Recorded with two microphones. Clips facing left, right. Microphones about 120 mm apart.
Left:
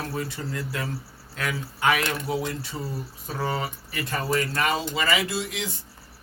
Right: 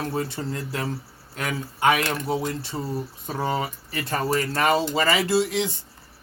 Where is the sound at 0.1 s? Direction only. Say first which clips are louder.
Right 3 dB; 30° right (ahead or behind).